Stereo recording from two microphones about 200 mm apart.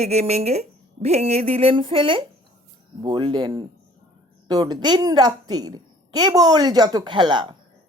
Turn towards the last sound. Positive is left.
turn(degrees=-25)  # may be behind; listen again after turning